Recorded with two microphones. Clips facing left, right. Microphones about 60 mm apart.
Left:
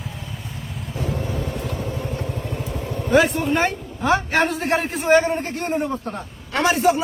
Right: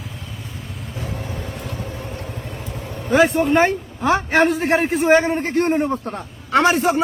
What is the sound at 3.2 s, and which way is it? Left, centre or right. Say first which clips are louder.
A man's voice: right 5 dB; right.